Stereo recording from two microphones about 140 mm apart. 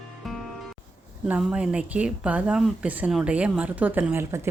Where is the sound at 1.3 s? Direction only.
5° right (ahead or behind).